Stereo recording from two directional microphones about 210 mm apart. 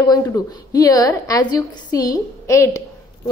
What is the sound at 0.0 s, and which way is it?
A woman's voice, 15° left (ahead or behind).